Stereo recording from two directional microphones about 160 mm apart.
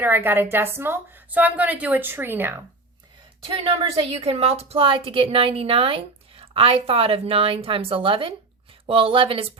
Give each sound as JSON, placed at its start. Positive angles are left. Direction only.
{"t": 0.0, "sound": "a woman's voice", "side_deg": -15}
{"t": 3.4, "sound": "a woman's voice", "side_deg": -35}